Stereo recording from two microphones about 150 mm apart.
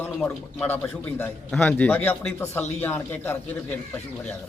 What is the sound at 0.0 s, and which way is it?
A man's voice, 10° left (ahead or behind).